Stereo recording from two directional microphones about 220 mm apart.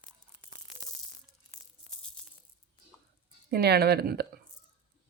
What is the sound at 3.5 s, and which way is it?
Speech, 45° right (ahead or behind).